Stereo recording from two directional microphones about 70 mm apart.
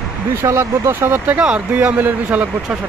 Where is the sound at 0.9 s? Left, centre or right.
Right.